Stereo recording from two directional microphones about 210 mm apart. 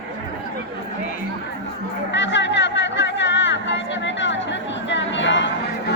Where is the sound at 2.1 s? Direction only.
60° left (ahead or behind).